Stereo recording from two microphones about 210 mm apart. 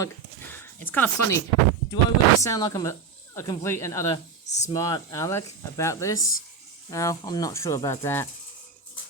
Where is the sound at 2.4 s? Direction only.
15° left (ahead or behind).